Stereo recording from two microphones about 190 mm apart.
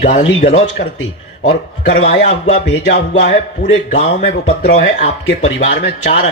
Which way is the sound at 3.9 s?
40° left (ahead or behind).